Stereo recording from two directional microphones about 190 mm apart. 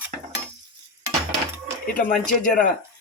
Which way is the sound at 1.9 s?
45° left (ahead or behind).